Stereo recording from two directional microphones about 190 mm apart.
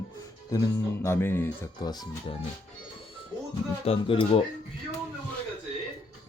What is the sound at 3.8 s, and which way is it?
Speech, 30° left (ahead or behind).